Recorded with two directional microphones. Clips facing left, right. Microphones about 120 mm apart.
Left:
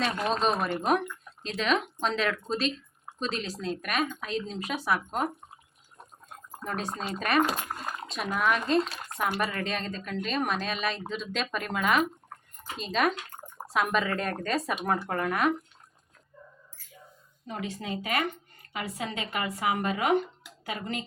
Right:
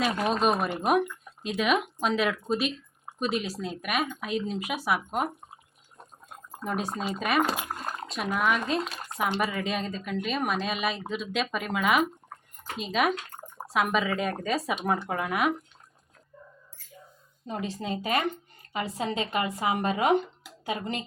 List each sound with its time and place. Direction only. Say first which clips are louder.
0.0 s speech: right 2 dB; 10° right (ahead or behind)
6.7 s speech: right 3 dB; 10° right (ahead or behind)
17.4 s speech: right 3 dB; 30° right (ahead or behind)